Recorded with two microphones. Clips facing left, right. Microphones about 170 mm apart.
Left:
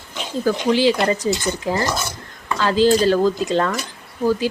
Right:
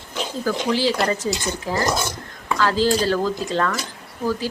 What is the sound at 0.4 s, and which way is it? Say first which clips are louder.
Speech: left 5 dB; 20° left (ahead or behind).